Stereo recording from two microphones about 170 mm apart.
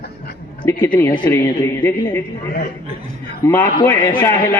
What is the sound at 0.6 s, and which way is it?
Speech, 10° left (ahead or behind).